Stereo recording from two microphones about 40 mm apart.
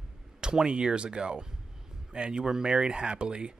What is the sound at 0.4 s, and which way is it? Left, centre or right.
Speech, right.